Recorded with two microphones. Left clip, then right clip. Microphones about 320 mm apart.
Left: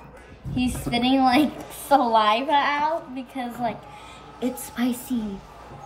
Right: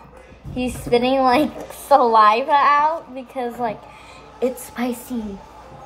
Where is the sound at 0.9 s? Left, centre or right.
Centre.